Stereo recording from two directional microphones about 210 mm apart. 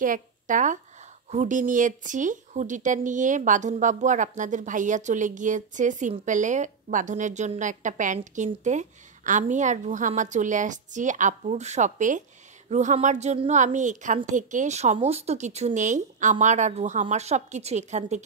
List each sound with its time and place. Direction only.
0.0 s speech: 40° right (ahead or behind)